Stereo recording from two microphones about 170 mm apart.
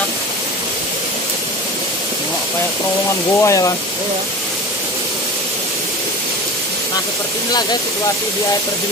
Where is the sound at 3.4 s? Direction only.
20° left (ahead or behind).